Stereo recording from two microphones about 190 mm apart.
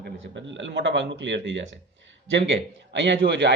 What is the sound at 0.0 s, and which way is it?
Speech, 70° right (ahead or behind).